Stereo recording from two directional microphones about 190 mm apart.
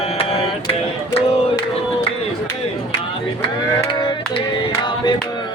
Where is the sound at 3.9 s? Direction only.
25° left (ahead or behind).